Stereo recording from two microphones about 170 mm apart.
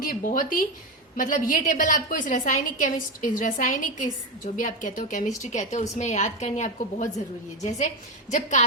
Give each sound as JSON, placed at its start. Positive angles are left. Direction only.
{"t": 0.0, "sound": "a woman's voice", "side_deg": 50}